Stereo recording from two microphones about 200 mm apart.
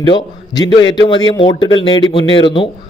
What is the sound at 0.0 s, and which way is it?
Speech, 20° left (ahead or behind).